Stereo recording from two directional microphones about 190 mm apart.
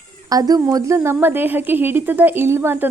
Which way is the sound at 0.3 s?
20° right (ahead or behind).